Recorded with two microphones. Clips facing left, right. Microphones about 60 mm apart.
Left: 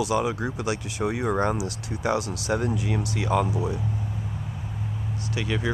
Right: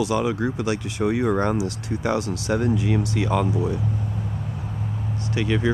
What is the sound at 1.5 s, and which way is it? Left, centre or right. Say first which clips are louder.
Speech: right 5 dB; right.